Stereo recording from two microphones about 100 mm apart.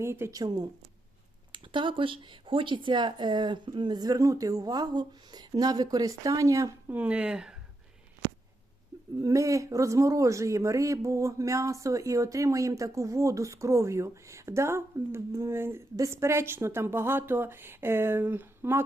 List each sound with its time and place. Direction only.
0.0 s speech: 25° right (ahead or behind)
0.3 s speech: 45° right (ahead or behind)
1.5 s speech: 55° right (ahead or behind); by 6.9 s 30° right (ahead or behind)
6.9 s speech: 15° right (ahead or behind)
9.2 s speech: 35° right (ahead or behind)